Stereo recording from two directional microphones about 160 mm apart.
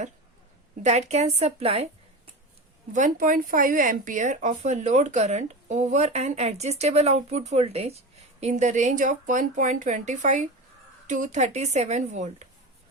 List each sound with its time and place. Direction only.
0.8 s a woman's voice: 45° right (ahead or behind)
2.9 s speech: 55° right (ahead or behind)